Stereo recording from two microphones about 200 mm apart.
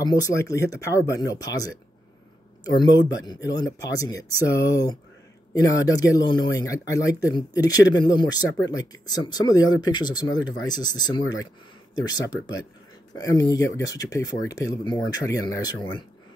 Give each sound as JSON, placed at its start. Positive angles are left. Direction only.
{"t": 0.0, "sound": "speech", "side_deg": 15}